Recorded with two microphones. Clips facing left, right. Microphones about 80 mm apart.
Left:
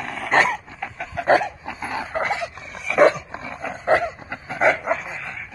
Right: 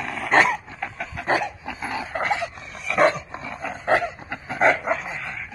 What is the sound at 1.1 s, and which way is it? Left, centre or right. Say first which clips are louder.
Dog: left 6 dB; left.